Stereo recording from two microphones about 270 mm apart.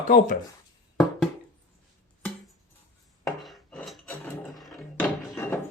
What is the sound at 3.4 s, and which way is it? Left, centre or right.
Cutlery, centre.